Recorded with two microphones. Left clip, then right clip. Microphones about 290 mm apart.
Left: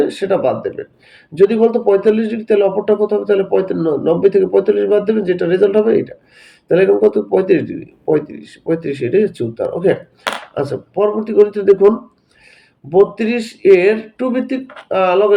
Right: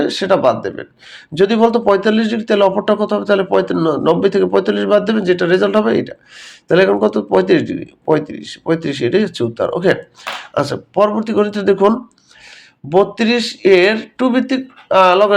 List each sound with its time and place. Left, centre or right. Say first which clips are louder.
0.0 s speech: right 2 dB; centre
12.9 s speech: even; centre